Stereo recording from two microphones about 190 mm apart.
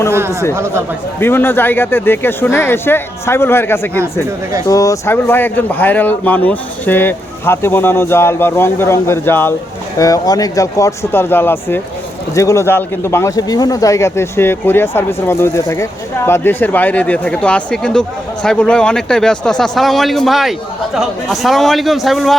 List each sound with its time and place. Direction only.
0.1 s chatter: 15° right (ahead or behind)
0.5 s speech: 15° right (ahead or behind)
1.2 s speech: 10° left (ahead or behind)